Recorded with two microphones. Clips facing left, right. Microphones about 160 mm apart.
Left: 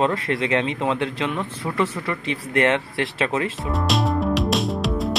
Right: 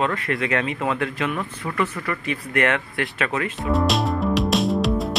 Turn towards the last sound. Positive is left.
turn(degrees=0)  # may be behind; listen again after turning